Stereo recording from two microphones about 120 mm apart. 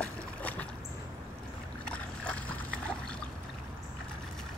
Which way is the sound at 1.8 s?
10° left (ahead or behind).